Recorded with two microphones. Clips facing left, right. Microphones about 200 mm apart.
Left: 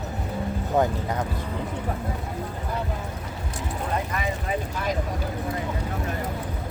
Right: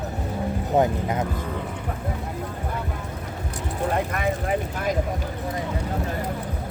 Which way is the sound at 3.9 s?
55° right (ahead or behind).